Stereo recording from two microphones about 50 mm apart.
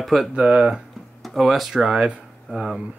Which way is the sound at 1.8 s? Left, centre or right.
Centre.